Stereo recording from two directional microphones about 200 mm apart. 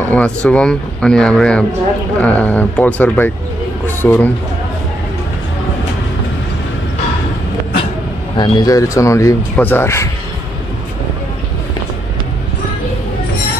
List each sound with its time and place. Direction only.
0.1 s speech: 5° left (ahead or behind)
3.8 s a sound: 10° left (ahead or behind)
8.4 s speech: 20° left (ahead or behind)